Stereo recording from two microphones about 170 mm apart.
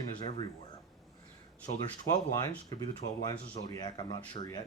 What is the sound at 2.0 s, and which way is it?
Speech, 20° left (ahead or behind).